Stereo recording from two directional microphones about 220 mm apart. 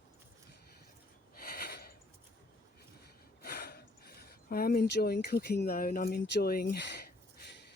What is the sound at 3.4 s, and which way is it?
Speech, 45° left (ahead or behind).